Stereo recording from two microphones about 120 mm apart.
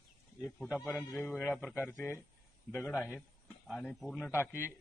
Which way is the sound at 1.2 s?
15° left (ahead or behind).